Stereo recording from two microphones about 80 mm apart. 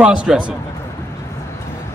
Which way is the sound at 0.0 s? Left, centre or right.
Centre.